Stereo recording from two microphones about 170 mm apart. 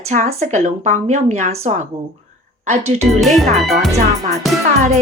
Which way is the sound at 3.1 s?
Centre (ahead or behind).